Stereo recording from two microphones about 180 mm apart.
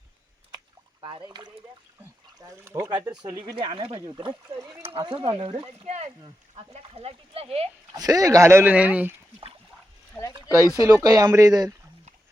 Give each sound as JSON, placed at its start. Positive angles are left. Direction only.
{"t": 1.0, "sound": "speech", "side_deg": -25}
{"t": 3.5, "sound": "speech", "side_deg": -25}
{"t": 7.9, "sound": "speech", "side_deg": -20}
{"t": 10.2, "sound": "a sound", "side_deg": 15}
{"t": 10.8, "sound": "speech", "side_deg": -20}